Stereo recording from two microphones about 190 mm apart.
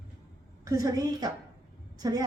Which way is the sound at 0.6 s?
15° right (ahead or behind).